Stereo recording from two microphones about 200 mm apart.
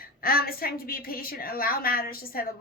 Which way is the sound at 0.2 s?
50° left (ahead or behind).